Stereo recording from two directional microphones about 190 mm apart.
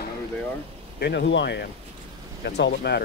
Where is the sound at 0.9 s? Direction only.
65° left (ahead or behind).